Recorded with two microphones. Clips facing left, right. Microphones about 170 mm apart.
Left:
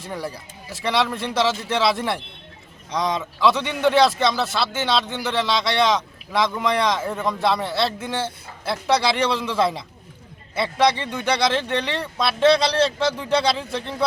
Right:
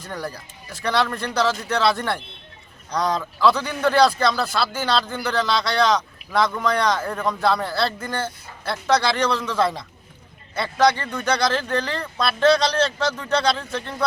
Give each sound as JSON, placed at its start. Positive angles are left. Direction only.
{"t": 0.1, "sound": "speech", "side_deg": 5}
{"t": 12.7, "sound": "speech", "side_deg": 25}
{"t": 13.3, "sound": "speech", "side_deg": 5}